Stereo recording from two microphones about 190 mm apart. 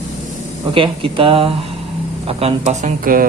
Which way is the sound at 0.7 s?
30° right (ahead or behind).